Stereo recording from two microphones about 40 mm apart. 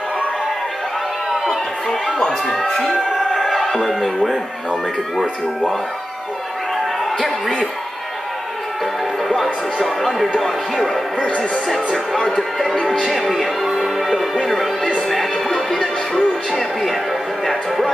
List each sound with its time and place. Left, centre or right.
2.5 s speech: centre
3.3 s music: centre
9.4 s speech: centre
11.1 s speech: left
11.7 s speech: centre
13.7 s music: centre
14.4 s speech: centre
15.0 s music: centre
15.8 s music: centre
17.5 s speech: centre